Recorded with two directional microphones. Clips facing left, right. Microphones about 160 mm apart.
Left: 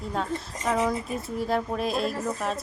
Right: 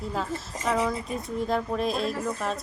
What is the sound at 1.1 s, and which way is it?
A woman's voice, centre (ahead or behind).